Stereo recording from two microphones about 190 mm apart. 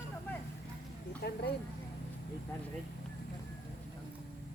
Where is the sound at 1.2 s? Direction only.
60° left (ahead or behind).